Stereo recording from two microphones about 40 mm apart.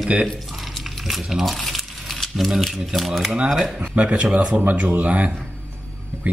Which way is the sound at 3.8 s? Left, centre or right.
Right.